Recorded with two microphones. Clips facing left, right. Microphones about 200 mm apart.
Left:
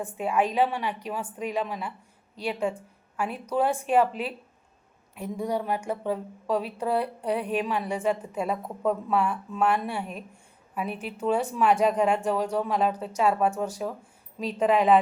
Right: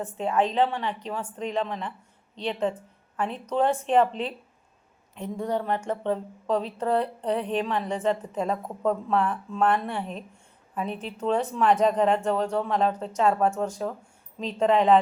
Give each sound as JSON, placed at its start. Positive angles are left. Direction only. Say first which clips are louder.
{"t": 0.0, "sound": "a woman's voice", "louder": "right 1 dB", "side_deg": 10}